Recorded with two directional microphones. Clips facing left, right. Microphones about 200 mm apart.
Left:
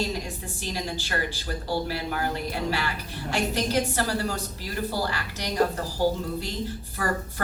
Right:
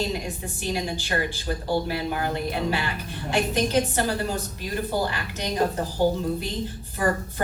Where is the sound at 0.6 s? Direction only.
15° right (ahead or behind).